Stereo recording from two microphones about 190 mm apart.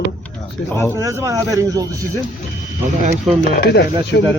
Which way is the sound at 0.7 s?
10° left (ahead or behind).